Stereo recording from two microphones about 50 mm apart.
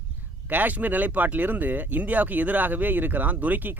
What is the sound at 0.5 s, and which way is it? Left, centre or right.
Speech, right.